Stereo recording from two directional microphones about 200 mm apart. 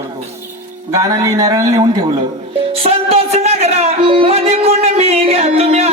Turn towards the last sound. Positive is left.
turn(degrees=-30)  # may be behind; listen again after turning